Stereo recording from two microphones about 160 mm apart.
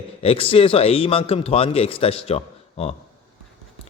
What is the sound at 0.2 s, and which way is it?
A man's voice, 35° left (ahead or behind).